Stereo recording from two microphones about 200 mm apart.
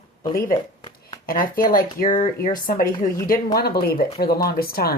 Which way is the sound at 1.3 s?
45° left (ahead or behind).